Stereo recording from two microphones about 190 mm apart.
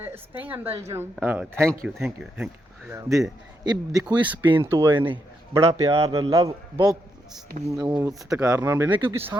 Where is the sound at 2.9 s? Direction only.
15° right (ahead or behind).